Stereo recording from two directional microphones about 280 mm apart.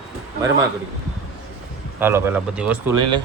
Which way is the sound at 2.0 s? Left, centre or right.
Centre.